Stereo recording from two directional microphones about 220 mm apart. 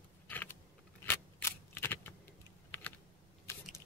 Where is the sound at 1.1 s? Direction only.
10° left (ahead or behind).